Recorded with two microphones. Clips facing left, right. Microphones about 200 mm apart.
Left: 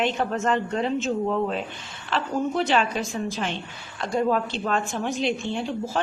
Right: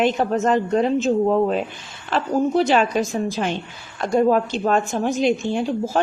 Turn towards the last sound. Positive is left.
turn(degrees=-45)  # may be behind; listen again after turning